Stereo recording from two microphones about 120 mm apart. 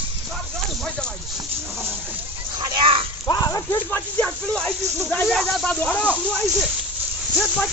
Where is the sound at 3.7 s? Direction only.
15° left (ahead or behind).